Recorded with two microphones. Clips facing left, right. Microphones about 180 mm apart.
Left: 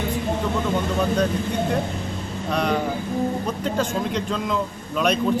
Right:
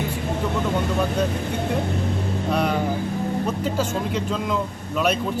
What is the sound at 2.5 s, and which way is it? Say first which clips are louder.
Speech: even; 5° right (ahead or behind).